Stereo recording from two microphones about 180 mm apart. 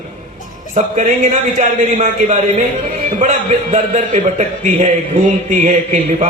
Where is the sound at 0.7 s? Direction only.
45° right (ahead or behind).